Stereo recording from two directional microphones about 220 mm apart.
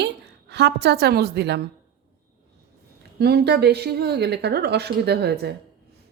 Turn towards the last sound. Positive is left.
turn(degrees=-50)  # may be behind; listen again after turning